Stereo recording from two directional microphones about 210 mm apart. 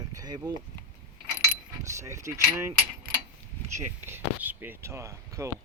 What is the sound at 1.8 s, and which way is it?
Speech, 15° right (ahead or behind).